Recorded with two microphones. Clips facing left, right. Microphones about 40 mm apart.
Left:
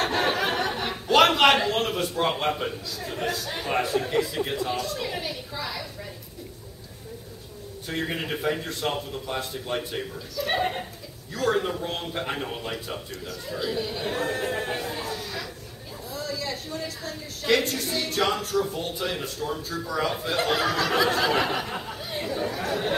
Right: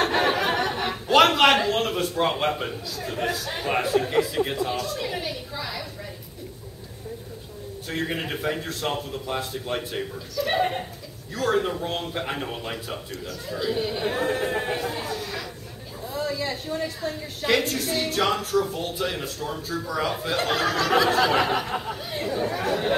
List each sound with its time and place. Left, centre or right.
0.0 s speech: centre
7.9 s speech: centre
13.7 s speech: centre
16.1 s a sound: right
16.8 s a woman's voice: right
17.5 s speech: centre